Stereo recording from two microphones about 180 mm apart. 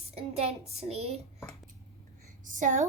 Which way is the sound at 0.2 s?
35° right (ahead or behind).